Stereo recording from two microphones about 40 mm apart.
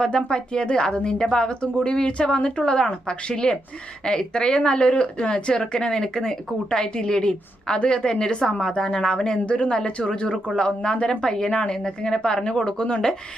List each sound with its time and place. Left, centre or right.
0.0 s speech: left
11.2 s speech: centre